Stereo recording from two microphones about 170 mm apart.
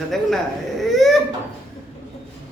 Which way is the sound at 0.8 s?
Centre (ahead or behind).